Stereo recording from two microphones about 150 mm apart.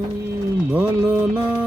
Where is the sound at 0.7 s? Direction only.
15° right (ahead or behind).